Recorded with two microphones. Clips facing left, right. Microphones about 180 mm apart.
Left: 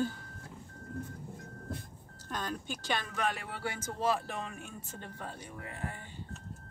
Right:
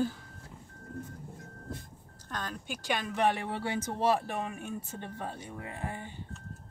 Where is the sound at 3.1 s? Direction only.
25° right (ahead or behind).